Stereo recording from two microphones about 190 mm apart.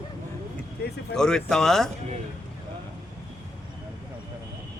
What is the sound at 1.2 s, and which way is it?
Speech, 5° left (ahead or behind).